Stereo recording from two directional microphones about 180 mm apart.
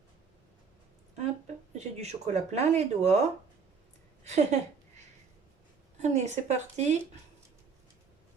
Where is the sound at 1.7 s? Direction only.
40° right (ahead or behind).